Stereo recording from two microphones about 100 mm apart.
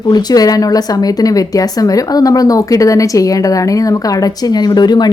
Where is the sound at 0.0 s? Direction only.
45° left (ahead or behind).